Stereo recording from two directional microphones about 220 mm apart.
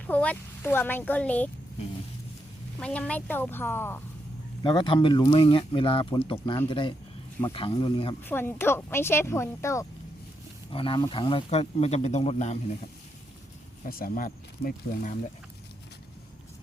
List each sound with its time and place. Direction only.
0.1 s speech: 5° left (ahead or behind)
2.7 s speech: 5° left (ahead or behind)
4.6 s speech: 20° left (ahead or behind)
8.2 s speech: 10° left (ahead or behind)
10.7 s speech: 25° left (ahead or behind)
13.8 s speech: 40° left (ahead or behind)